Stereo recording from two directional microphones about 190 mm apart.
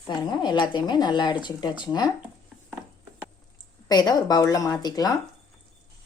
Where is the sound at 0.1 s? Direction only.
25° left (ahead or behind).